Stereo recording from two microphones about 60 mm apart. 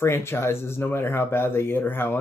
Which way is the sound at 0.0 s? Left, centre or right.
Left.